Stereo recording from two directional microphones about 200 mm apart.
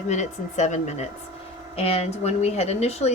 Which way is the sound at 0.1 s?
35° left (ahead or behind).